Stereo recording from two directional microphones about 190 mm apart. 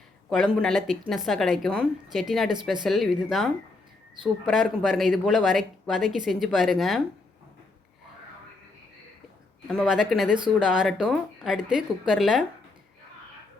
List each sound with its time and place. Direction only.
0.3 s speech: centre (ahead or behind)
9.6 s speech: centre (ahead or behind)